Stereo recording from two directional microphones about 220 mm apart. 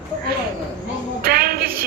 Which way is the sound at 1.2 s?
40° right (ahead or behind).